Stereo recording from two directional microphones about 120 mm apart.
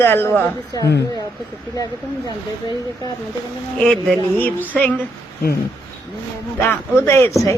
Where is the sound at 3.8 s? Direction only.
5° left (ahead or behind).